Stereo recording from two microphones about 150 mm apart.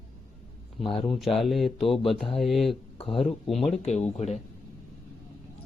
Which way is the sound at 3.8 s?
45° left (ahead or behind).